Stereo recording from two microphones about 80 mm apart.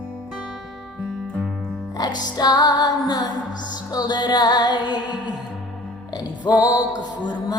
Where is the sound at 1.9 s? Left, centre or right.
Left.